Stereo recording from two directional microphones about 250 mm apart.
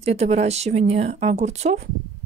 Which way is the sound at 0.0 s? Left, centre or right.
Right.